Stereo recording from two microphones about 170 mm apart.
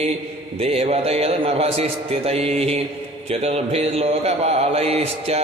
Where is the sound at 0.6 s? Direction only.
40° right (ahead or behind).